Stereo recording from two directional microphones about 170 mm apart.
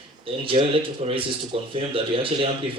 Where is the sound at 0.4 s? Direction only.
30° right (ahead or behind).